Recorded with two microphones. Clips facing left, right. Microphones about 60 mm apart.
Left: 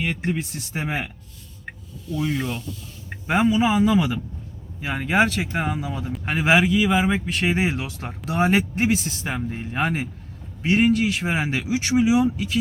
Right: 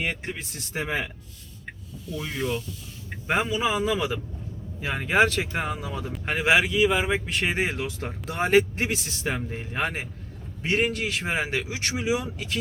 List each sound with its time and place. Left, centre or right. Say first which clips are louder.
0.0 s speech: left 5 dB; centre
2.1 s speech: left 3 dB; centre